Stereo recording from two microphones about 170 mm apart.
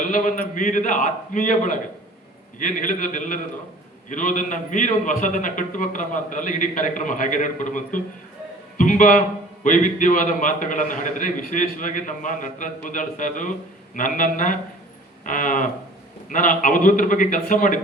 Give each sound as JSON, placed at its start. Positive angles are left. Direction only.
{"t": 0.0, "sound": "a man's voice", "side_deg": 50}
{"t": 8.8, "sound": "a man's voice", "side_deg": 50}